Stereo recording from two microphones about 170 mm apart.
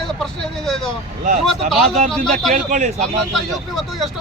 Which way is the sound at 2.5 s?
55° right (ahead or behind).